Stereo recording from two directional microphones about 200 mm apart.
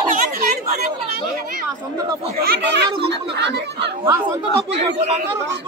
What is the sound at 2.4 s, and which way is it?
A child's voice, 55° right (ahead or behind).